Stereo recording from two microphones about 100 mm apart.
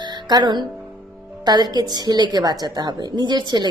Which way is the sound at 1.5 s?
45° right (ahead or behind).